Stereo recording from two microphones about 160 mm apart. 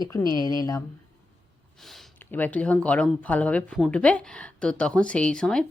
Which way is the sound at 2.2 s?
10° left (ahead or behind).